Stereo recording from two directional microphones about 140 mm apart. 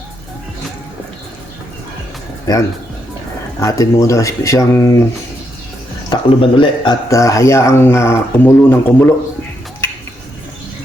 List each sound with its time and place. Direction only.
2.5 s speech: 25° left (ahead or behind)
6.1 s speech: 35° left (ahead or behind)
7.1 s speech: 20° left (ahead or behind)